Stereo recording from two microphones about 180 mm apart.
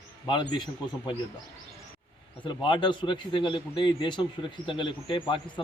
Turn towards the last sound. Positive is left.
turn(degrees=30)  # may be behind; listen again after turning